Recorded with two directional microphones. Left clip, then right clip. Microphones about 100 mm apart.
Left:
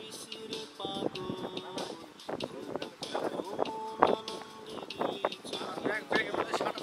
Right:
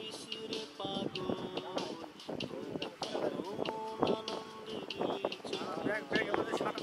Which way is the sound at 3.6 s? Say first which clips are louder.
Left 7 dB; 30° left (ahead or behind).